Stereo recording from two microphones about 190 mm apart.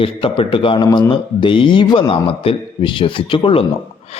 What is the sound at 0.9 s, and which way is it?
Speech, 15° left (ahead or behind).